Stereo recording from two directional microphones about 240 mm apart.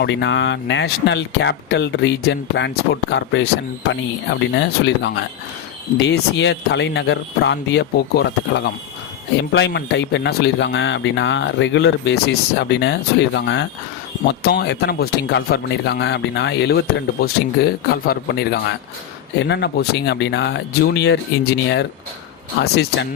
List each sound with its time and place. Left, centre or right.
0.0 s speech: left